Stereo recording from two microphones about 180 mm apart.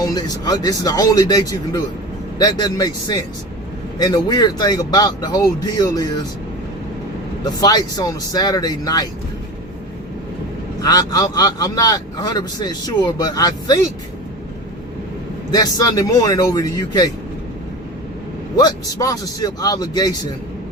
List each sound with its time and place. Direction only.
0.0 s speech: 20° left (ahead or behind)
7.4 s speech: 20° left (ahead or behind)
10.8 s speech: 20° left (ahead or behind)
15.5 s speech: 20° left (ahead or behind)
18.5 s speech: 20° left (ahead or behind)